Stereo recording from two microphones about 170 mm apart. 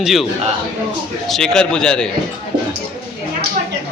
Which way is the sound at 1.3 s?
5° left (ahead or behind).